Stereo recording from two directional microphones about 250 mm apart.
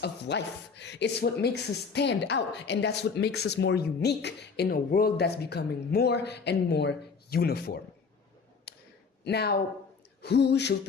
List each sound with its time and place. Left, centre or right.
0.0 s speech: left
8.7 s a sound: left
9.2 s speech: left